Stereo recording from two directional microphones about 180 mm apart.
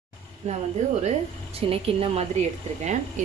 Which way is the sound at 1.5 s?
30° right (ahead or behind).